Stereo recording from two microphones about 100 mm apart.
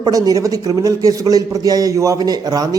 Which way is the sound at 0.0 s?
40° right (ahead or behind).